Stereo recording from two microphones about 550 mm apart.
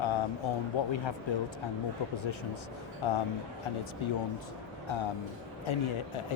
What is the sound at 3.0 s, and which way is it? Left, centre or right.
Speech, left.